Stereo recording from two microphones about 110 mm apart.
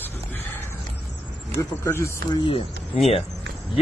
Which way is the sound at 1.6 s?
30° left (ahead or behind).